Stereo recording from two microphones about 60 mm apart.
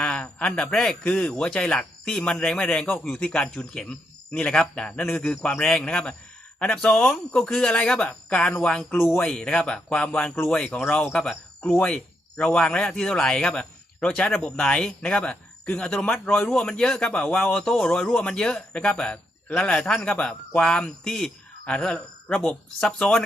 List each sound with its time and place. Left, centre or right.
0.0 s a sound: centre
0.7 s a man's voice: centre; by 10.9 s left
11.1 s a man's voice: centre